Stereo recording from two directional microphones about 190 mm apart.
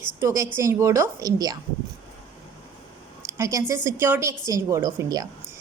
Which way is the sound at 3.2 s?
15° right (ahead or behind).